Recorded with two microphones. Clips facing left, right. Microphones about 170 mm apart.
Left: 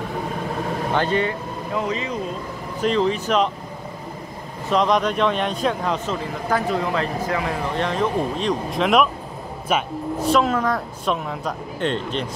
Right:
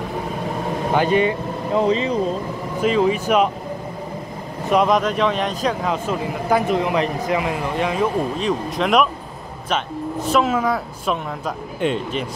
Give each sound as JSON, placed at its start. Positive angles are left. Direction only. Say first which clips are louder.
{"t": 0.9, "sound": "speech", "louder": "right 4 dB", "side_deg": -15}
{"t": 1.8, "sound": "speech", "louder": "right 7 dB", "side_deg": -30}
{"t": 2.8, "sound": "speech", "louder": "right 2 dB", "side_deg": -5}
{"t": 4.6, "sound": "speech", "louder": "right 2 dB", "side_deg": -5}
{"t": 10.3, "sound": "speech", "louder": "right 1 dB", "side_deg": -5}